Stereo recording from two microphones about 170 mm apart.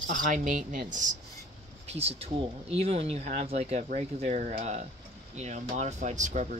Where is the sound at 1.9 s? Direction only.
35° right (ahead or behind).